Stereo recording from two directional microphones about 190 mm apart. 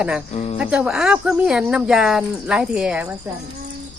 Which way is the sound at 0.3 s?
35° left (ahead or behind).